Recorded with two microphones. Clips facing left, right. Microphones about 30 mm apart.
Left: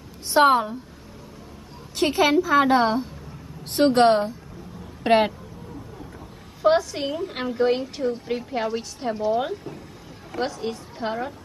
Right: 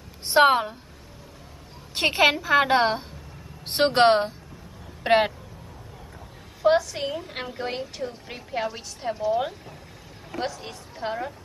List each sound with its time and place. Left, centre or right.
0.3 s a woman's voice: right
2.0 s a woman's voice: right
5.0 s speech: centre
6.6 s a woman's voice: centre